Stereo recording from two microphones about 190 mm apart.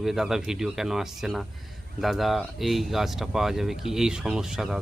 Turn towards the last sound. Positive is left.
turn(degrees=-5)  # may be behind; listen again after turning